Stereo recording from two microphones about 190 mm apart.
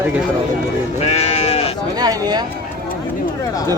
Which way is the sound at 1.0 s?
35° left (ahead or behind).